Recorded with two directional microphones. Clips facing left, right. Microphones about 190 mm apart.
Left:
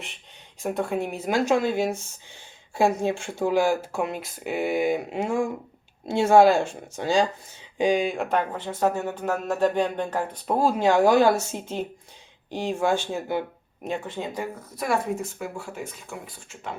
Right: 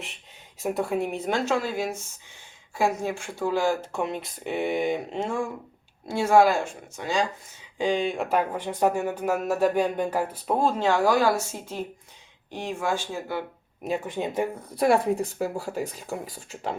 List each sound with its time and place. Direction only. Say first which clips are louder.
0.6 s speech: even; 5° right (ahead or behind); by 5.5 s 15° left (ahead or behind)
6.1 s speech: left 3 dB; 25° left (ahead or behind)
7.8 s speech: left 2 dB; 10° left (ahead or behind)
13.8 s speech: right 2 dB; 5° right (ahead or behind)
14.1 s speech: right 4 dB; 20° right (ahead or behind)
14.5 s speech: right 6 dB; 30° right (ahead or behind)